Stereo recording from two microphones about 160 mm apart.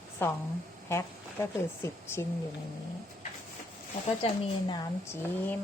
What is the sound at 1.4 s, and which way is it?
Speech, 15° left (ahead or behind).